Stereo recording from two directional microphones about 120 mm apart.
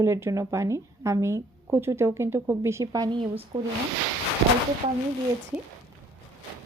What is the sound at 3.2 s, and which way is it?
Speech, 50° right (ahead or behind).